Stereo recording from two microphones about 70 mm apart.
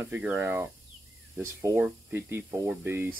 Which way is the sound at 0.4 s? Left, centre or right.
Right.